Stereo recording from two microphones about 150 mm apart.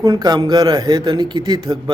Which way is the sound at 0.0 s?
25° right (ahead or behind).